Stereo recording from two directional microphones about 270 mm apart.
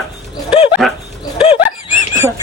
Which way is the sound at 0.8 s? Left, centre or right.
Centre.